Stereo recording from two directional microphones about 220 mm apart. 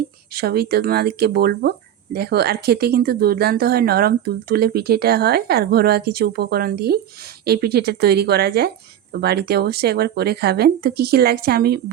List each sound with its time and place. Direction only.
0.3 s speech: 45° right (ahead or behind)